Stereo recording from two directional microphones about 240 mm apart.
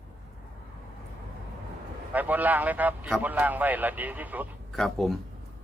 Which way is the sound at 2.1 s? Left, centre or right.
Centre.